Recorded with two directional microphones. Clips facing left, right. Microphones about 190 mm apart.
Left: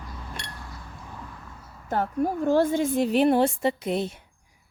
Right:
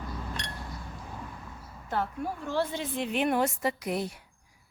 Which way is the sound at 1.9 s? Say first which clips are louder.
Left 6 dB; 45° left (ahead or behind).